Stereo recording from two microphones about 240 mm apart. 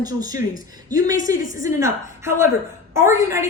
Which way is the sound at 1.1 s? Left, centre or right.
Left.